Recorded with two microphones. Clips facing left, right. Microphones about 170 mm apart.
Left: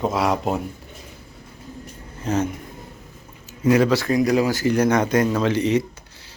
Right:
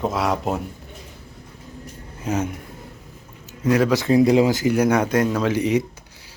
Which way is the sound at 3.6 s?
Centre (ahead or behind).